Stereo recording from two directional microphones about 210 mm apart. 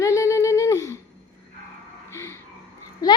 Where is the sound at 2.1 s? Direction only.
10° left (ahead or behind).